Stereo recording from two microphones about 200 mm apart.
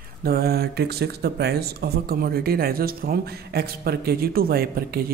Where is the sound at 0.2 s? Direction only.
50° right (ahead or behind).